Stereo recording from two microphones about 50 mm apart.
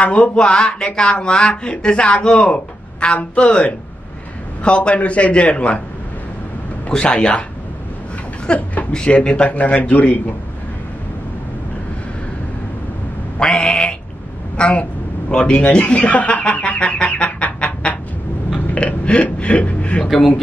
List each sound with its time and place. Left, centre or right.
0.0 s speech: left
6.9 s speech: centre
8.5 s speech: centre
13.4 s quack: centre
14.6 s a man's voice: left